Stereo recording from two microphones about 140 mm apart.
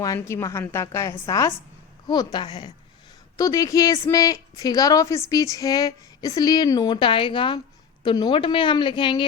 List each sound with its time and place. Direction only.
0.0 s a woman's voice: 20° left (ahead or behind)